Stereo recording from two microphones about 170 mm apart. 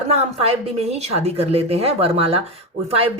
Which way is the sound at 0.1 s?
35° right (ahead or behind).